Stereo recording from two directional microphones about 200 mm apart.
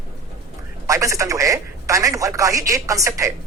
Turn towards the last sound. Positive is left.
turn(degrees=-15)  # may be behind; listen again after turning